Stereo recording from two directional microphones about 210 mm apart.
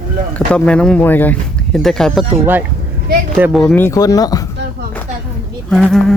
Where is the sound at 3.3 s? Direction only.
5° right (ahead or behind); by 4.4 s 15° left (ahead or behind).